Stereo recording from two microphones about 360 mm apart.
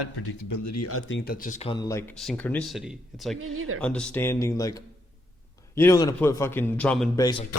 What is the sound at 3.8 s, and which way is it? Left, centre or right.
A man's voice, centre.